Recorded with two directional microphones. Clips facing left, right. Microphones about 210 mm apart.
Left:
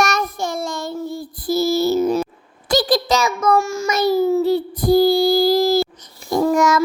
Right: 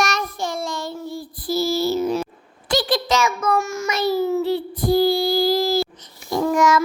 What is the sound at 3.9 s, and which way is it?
Child singing, 40° left (ahead or behind).